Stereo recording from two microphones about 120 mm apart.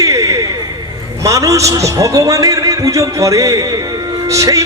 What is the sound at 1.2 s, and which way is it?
A man's voice, 25° right (ahead or behind).